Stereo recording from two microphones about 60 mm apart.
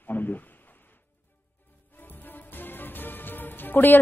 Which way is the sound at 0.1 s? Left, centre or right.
Left.